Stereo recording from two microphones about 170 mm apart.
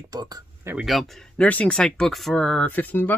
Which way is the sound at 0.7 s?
Centre (ahead or behind).